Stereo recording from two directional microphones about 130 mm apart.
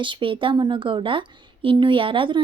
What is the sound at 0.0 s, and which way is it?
A woman's voice, 40° right (ahead or behind).